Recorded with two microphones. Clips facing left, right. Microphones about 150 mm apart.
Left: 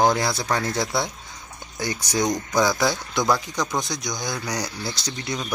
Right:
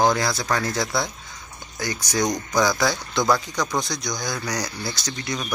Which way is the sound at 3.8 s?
20° left (ahead or behind).